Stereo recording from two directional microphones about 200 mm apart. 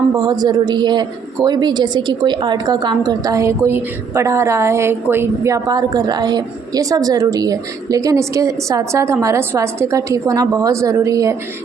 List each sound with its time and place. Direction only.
0.2 s a woman's voice: 20° right (ahead or behind)